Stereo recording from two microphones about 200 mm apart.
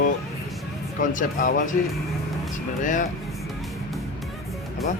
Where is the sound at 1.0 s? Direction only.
40° left (ahead or behind).